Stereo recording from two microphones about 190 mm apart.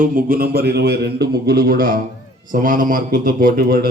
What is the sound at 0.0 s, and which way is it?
Speech, 50° right (ahead or behind).